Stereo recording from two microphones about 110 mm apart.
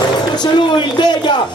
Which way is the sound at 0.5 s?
40° left (ahead or behind).